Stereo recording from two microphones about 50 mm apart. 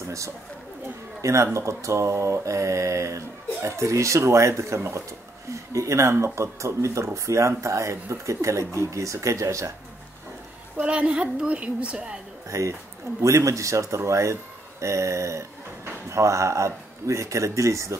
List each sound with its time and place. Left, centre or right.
1.2 s speech: right
5.5 s speech: right
10.8 s a woman's voice: right
12.4 s speech: right